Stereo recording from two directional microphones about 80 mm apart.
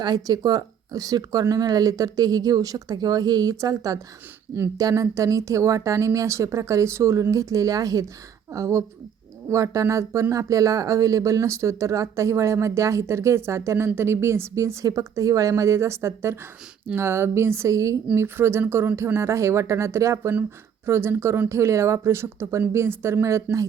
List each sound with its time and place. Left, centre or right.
0.0 s speech: right
18.1 s speech: right